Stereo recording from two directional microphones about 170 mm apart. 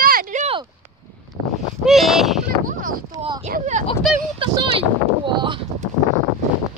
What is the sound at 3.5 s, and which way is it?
Speech, 45° right (ahead or behind).